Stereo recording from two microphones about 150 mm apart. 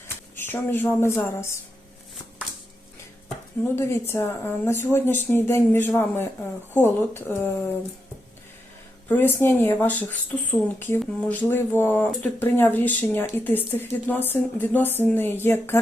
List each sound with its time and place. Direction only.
0.3 s speech: 15° left (ahead or behind)
3.6 s speech: 15° left (ahead or behind)
9.0 s speech: 10° left (ahead or behind)